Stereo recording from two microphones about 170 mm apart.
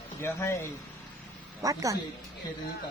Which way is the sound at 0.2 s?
15° left (ahead or behind).